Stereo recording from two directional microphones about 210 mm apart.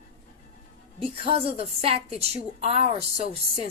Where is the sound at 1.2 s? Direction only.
30° right (ahead or behind).